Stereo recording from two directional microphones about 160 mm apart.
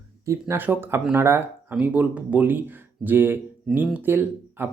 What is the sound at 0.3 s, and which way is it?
Speech, 15° right (ahead or behind).